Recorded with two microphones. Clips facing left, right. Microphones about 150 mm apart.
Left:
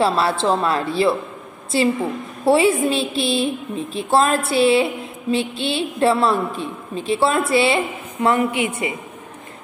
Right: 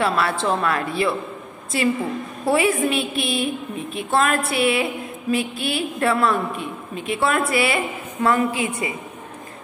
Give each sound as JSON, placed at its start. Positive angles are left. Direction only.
{"t": 0.0, "sound": "a woman's voice", "side_deg": 30}